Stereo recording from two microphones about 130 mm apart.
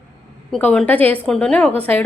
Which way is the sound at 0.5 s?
5° left (ahead or behind).